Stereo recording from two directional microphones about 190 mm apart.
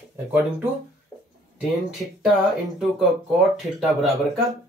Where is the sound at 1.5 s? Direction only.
Centre (ahead or behind).